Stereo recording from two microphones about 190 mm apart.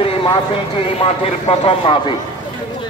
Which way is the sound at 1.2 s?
30° left (ahead or behind).